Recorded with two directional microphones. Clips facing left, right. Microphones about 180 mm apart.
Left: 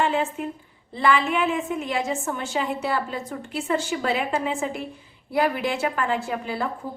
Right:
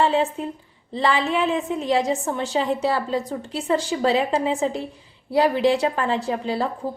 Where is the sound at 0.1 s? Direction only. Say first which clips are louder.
Right 3 dB; 35° right (ahead or behind).